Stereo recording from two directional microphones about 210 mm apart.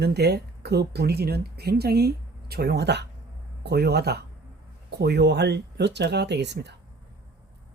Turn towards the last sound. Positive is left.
turn(degrees=-55)  # may be behind; listen again after turning